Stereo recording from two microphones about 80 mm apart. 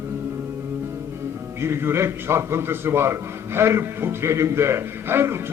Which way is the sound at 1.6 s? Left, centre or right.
Right.